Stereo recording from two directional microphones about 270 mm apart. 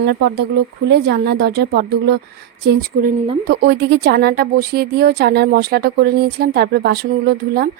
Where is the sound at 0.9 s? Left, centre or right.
Right.